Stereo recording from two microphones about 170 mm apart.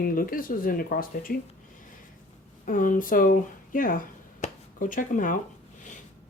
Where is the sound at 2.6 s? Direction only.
50° left (ahead or behind).